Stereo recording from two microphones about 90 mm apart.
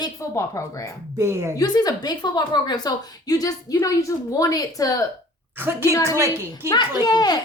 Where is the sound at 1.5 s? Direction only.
45° left (ahead or behind).